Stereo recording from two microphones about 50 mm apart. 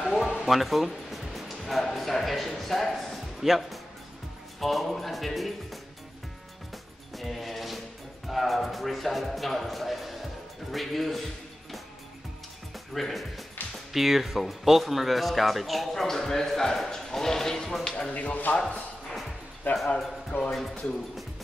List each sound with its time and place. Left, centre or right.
0.0 s music: centre
0.5 s speech: centre
7.2 s music: centre
8.3 s speech: centre
12.9 s speech: centre
13.6 s music: left
13.9 s speech: centre
18.1 s speech: left
19.0 s music: centre
19.7 s speech: left
20.3 s music: left